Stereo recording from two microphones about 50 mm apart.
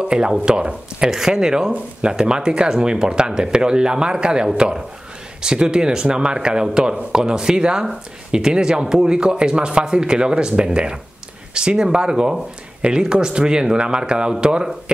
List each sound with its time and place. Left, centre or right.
0.0 s speech: centre